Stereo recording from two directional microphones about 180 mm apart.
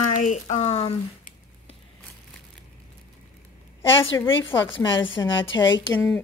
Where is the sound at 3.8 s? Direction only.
90° left.